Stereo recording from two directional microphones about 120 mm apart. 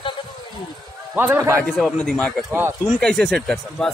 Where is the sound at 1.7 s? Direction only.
Centre (ahead or behind).